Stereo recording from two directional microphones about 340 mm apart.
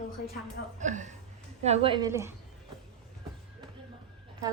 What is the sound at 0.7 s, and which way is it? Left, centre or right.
A woman's voice, right.